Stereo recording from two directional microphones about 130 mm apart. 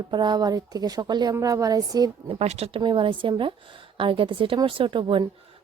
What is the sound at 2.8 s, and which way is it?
A woman's voice, 40° right (ahead or behind).